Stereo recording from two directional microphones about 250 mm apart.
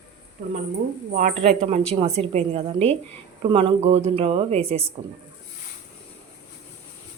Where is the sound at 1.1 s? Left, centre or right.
Right.